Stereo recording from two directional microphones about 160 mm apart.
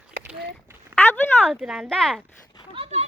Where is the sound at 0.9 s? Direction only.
10° left (ahead or behind).